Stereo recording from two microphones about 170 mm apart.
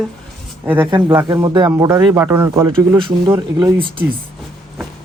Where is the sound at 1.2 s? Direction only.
25° right (ahead or behind).